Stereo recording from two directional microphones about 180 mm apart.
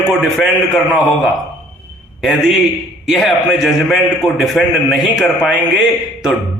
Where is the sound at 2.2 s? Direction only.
Centre (ahead or behind).